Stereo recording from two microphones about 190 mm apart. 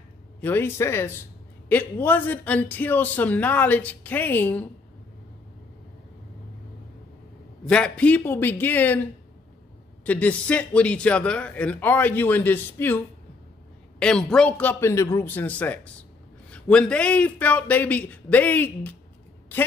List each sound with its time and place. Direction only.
0.4 s a man's voice: 10° left (ahead or behind)
7.6 s a man's voice: 5° left (ahead or behind)
10.0 s a man's voice: 5° left (ahead or behind)